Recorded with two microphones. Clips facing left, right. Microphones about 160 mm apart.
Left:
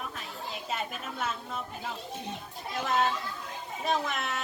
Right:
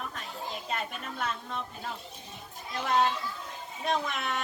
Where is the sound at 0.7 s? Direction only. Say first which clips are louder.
Left 2 dB; 5° left (ahead or behind).